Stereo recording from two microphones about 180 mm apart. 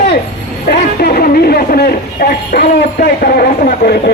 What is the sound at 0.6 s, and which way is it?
A man's voice, 55° left (ahead or behind).